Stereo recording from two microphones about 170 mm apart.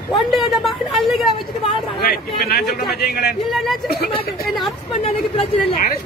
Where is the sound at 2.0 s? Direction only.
65° left (ahead or behind).